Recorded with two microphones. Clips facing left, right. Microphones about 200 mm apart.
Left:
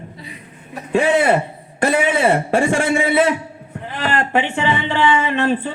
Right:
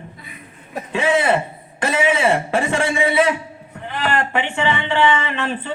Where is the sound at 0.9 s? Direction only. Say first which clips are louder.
Left 3 dB; 45° left (ahead or behind).